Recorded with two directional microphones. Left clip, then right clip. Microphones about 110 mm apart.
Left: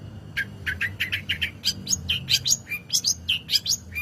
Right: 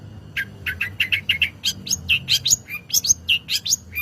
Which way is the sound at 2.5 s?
45° right (ahead or behind).